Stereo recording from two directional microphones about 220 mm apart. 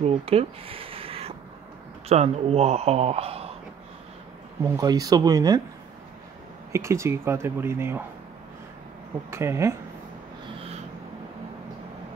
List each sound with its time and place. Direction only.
0.0 s speech: 25° right (ahead or behind)
4.6 s speech: 15° right (ahead or behind)
6.7 s speech: 15° right (ahead or behind)
9.3 s speech: 10° right (ahead or behind)